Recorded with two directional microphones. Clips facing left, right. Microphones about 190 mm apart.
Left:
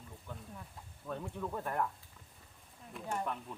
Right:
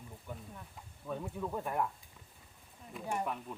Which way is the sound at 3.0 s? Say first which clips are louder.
Right 1 dB; 10° right (ahead or behind).